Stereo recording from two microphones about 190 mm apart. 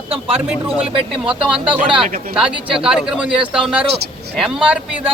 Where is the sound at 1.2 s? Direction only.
5° right (ahead or behind).